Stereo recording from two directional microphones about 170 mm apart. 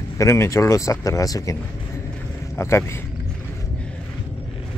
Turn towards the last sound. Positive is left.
turn(degrees=15)  # may be behind; listen again after turning